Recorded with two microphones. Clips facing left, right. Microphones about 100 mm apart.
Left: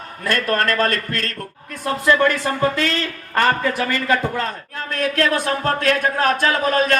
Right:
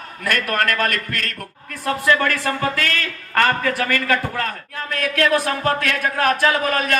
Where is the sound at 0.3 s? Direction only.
25° left (ahead or behind).